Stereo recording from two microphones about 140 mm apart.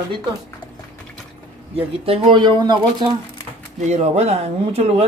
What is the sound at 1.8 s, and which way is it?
Speech, 45° right (ahead or behind).